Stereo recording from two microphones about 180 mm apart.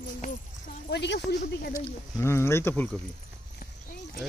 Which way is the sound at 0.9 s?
70° left (ahead or behind).